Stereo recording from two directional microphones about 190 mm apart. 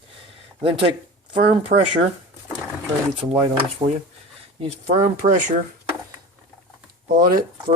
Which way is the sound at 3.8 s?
20° right (ahead or behind).